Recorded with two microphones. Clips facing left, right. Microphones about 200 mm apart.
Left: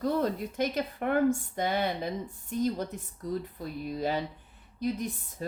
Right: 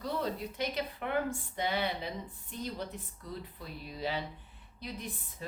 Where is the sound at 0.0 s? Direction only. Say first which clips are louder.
Left 7 dB; 50° left (ahead or behind).